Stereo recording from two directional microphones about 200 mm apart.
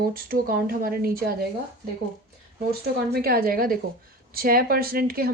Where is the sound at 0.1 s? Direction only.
45° right (ahead or behind).